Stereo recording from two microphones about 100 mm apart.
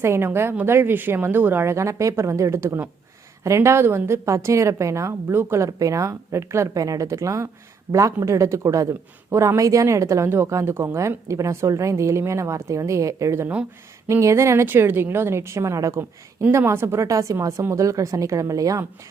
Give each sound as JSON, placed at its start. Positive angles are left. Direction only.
{"t": 0.0, "sound": "a woman's voice", "side_deg": -25}